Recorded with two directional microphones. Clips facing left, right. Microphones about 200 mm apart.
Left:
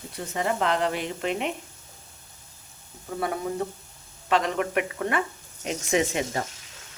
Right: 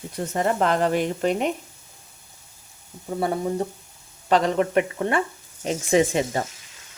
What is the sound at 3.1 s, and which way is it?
Speech, 30° right (ahead or behind).